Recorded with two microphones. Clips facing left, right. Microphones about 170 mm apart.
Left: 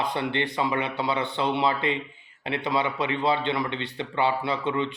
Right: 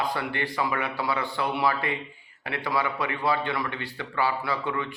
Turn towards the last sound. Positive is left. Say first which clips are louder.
# left 3 dB
turn(degrees=20)  # may be behind; listen again after turning